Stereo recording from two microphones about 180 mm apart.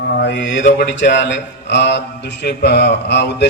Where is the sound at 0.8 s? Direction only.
75° left (ahead or behind).